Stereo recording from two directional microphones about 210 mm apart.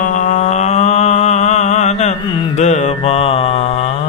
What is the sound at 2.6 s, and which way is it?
Mantra, 35° left (ahead or behind).